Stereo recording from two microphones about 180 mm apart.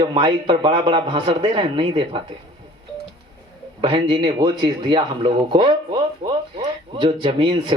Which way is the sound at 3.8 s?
25° right (ahead or behind).